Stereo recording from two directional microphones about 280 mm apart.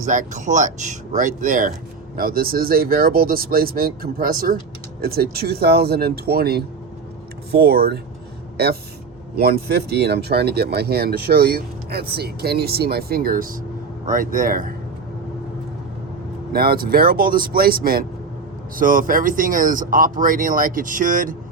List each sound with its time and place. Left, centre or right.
0.0 s speech: right
16.5 s speech: right